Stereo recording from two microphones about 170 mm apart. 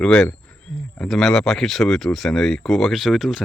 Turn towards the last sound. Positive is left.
turn(degrees=0)  # may be behind; listen again after turning